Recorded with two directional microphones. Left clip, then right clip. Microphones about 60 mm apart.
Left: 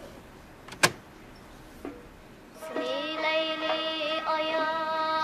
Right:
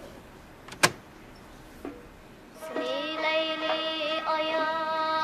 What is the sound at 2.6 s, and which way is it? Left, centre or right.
Music, right.